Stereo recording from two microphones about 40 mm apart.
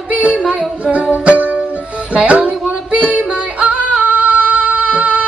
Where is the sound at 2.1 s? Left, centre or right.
Right.